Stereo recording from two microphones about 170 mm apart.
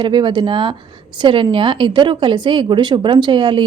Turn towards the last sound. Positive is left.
turn(degrees=-30)  # may be behind; listen again after turning